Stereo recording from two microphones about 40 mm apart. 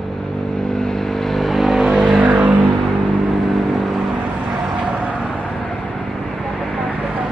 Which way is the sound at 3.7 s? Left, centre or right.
Centre.